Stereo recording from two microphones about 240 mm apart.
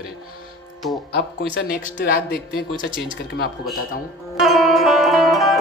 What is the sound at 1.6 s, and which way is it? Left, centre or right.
Speech, left.